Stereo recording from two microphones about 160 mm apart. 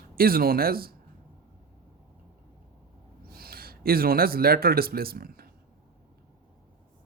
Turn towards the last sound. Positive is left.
turn(degrees=-70)  # may be behind; listen again after turning